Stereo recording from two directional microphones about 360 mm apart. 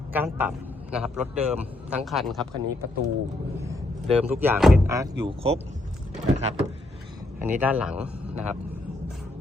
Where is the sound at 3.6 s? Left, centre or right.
Centre.